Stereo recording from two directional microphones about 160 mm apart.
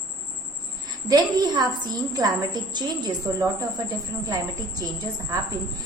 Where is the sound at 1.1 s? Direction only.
25° right (ahead or behind).